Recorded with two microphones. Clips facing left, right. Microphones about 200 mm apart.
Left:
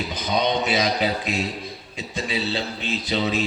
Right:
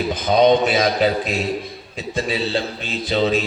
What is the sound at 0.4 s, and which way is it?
Speech, 50° right (ahead or behind).